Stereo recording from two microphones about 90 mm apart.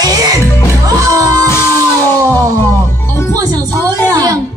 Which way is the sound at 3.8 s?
25° left (ahead or behind).